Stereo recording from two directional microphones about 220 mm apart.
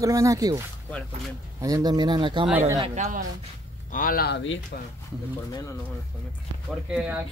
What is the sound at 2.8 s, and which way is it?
Speech, 35° right (ahead or behind).